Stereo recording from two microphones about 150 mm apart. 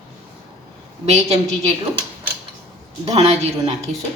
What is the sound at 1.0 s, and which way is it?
Speech, 45° right (ahead or behind).